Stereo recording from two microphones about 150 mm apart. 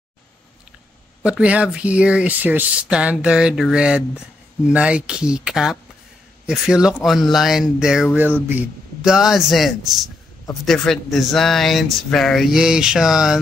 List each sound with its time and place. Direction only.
1.4 s speech: 10° right (ahead or behind)